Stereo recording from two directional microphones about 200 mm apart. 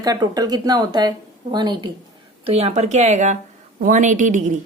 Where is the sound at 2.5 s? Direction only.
30° right (ahead or behind).